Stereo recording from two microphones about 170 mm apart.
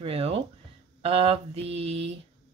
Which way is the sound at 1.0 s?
35° right (ahead or behind).